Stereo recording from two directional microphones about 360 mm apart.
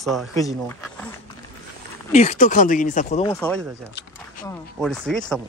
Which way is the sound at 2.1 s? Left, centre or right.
Centre.